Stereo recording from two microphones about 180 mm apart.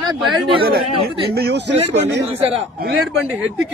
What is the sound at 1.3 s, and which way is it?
Speech, 65° right (ahead or behind).